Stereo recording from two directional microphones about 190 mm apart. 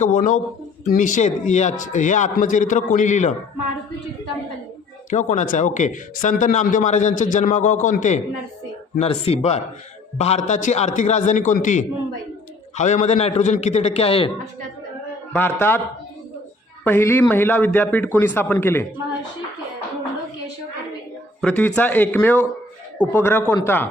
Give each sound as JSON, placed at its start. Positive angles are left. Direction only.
{"t": 0.0, "sound": "a man's voice", "side_deg": 40}
{"t": 5.1, "sound": "a man's voice", "side_deg": 40}
{"t": 15.3, "sound": "a man's voice", "side_deg": 10}
{"t": 16.8, "sound": "a man's voice", "side_deg": 10}
{"t": 21.4, "sound": "a man's voice", "side_deg": 10}